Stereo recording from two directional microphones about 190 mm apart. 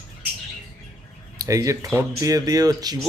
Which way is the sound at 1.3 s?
15° right (ahead or behind).